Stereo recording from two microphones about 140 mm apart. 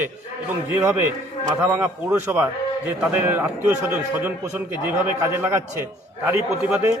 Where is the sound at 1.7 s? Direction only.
15° right (ahead or behind).